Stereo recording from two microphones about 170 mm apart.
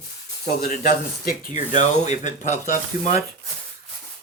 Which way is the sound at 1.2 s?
50° left (ahead or behind).